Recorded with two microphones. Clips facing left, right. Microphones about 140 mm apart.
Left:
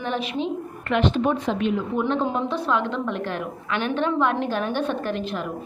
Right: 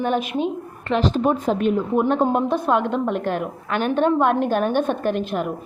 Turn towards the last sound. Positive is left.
turn(degrees=-50)  # may be behind; listen again after turning